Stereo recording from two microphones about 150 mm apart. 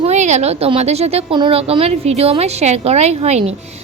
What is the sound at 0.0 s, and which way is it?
A woman's voice, 50° right (ahead or behind).